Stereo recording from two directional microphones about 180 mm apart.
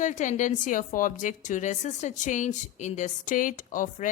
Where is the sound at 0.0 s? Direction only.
45° left (ahead or behind).